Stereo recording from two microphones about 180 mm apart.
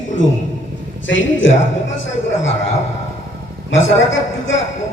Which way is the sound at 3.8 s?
90° left.